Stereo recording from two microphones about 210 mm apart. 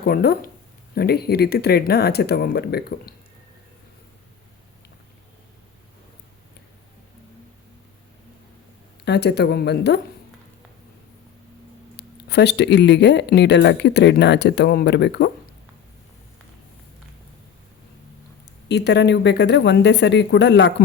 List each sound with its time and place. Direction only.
0.0 s speech: 45° left (ahead or behind)
9.0 s speech: 55° left (ahead or behind)
11.9 s speech: 55° left (ahead or behind)
18.7 s speech: 55° left (ahead or behind)